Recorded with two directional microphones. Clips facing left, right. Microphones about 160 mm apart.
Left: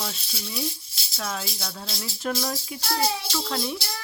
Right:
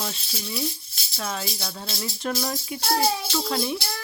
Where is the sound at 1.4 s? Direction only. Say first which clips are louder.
Right 2 dB; centre (ahead or behind).